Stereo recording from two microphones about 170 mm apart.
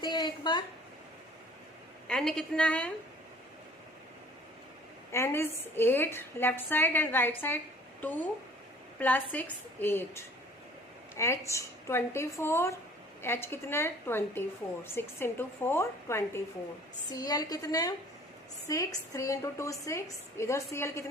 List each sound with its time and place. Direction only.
0.0 s a sound: 25° left (ahead or behind)
2.0 s a woman's voice: 5° left (ahead or behind)
5.1 s a woman's voice: 15° left (ahead or behind)